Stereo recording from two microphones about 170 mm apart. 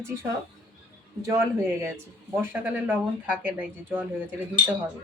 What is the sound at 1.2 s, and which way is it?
Speech, 15° right (ahead or behind).